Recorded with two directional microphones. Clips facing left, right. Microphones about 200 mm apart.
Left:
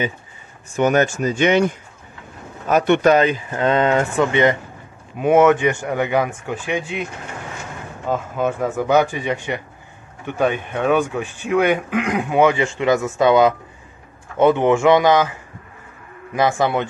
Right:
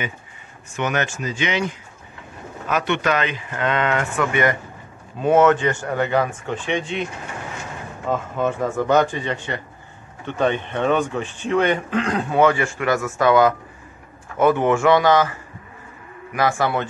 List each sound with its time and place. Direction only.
0.7 s speech: 40° left (ahead or behind); by 7.1 s 5° left (ahead or behind)
8.1 s speech: 5° left (ahead or behind)
16.3 s speech: 20° left (ahead or behind)